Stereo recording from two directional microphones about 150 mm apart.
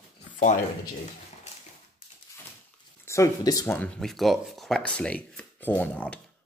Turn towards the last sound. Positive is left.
turn(degrees=10)  # may be behind; listen again after turning